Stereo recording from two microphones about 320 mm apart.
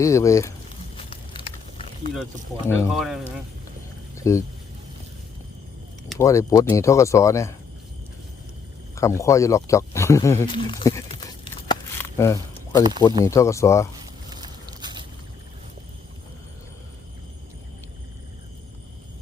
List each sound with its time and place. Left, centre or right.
0.0 s speech: centre
0.9 s a sound: centre
2.6 s speech: centre
4.2 s speech: centre
6.1 s speech: centre
9.0 s speech: centre
11.7 s a sound: centre
13.2 s speech: centre
14.3 s biting: centre